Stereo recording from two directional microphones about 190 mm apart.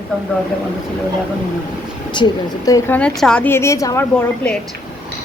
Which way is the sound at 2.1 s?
25° left (ahead or behind).